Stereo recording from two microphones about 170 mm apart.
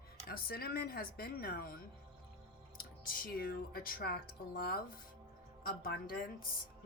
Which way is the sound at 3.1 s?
60° left (ahead or behind).